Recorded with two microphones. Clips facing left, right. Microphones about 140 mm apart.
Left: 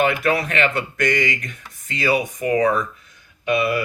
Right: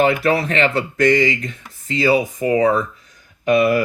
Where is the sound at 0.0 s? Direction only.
35° right (ahead or behind).